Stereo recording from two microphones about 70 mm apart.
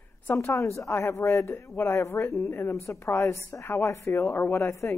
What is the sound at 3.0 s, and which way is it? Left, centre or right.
A woman's voice, left.